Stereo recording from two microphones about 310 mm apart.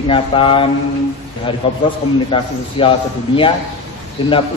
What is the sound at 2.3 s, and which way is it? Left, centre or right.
Speech, centre.